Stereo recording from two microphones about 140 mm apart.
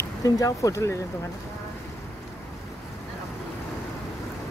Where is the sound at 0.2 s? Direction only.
25° left (ahead or behind).